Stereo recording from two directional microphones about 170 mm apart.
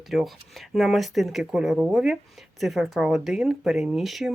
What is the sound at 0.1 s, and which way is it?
Speech, centre (ahead or behind).